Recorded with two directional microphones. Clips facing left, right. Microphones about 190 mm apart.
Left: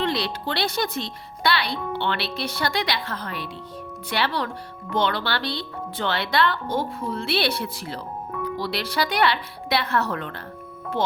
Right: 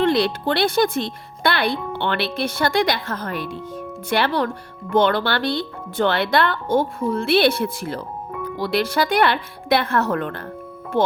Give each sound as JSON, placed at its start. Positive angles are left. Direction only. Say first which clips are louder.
{"t": 0.0, "sound": "speech", "louder": "right 7 dB", "side_deg": -50}